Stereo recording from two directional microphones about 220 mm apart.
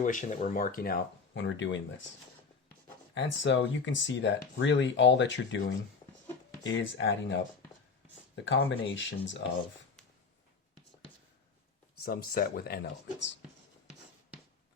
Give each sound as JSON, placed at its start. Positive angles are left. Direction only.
{"t": 0.0, "sound": "speech", "side_deg": 35}
{"t": 3.2, "sound": "speech", "side_deg": 55}
{"t": 6.7, "sound": "speech", "side_deg": 55}
{"t": 8.4, "sound": "speech", "side_deg": 55}
{"t": 12.0, "sound": "speech", "side_deg": 40}